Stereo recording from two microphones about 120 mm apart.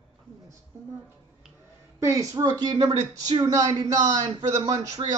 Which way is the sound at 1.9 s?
25° right (ahead or behind).